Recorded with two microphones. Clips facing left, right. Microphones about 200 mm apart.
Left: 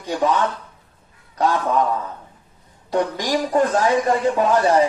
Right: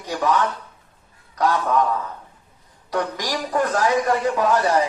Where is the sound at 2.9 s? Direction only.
25° left (ahead or behind).